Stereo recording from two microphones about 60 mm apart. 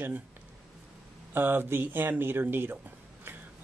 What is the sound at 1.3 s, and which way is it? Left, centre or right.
Speech, right.